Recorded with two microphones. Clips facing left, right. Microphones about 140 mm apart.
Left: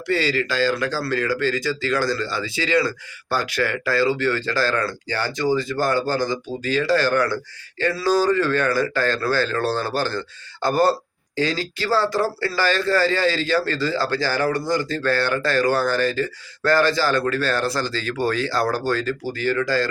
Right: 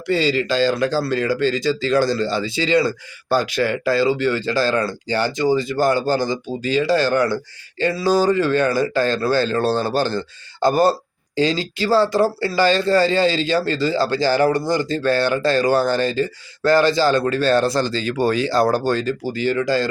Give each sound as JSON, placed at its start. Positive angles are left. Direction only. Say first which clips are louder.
{"t": 0.1, "sound": "speech", "louder": "right 3 dB", "side_deg": -20}